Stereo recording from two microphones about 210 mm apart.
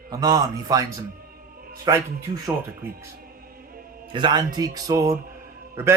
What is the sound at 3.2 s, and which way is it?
Music, 45° right (ahead or behind).